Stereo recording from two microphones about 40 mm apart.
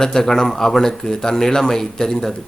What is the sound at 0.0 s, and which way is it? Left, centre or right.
A man's voice, centre.